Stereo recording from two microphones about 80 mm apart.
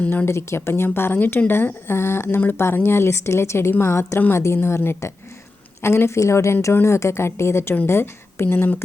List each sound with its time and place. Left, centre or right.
0.0 s a woman's voice: centre
0.3 s a woman's voice: left